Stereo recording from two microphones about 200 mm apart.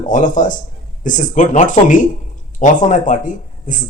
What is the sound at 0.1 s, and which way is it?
Speech, 40° left (ahead or behind).